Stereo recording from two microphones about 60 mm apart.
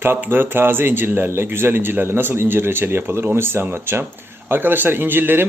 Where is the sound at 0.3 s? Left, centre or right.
Right.